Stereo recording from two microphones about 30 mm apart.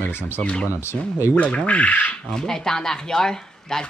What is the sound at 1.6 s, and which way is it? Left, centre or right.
Speech, left.